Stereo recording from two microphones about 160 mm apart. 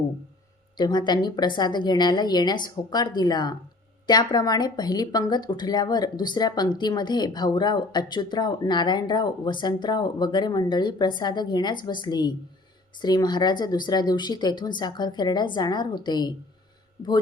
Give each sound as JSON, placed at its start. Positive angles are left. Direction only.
{"t": 0.8, "sound": "a woman's voice", "side_deg": 25}